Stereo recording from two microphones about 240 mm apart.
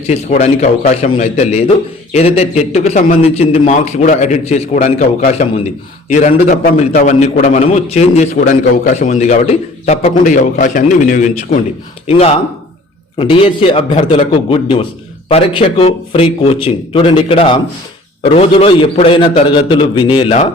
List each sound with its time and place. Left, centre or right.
0.1 s a man's voice: left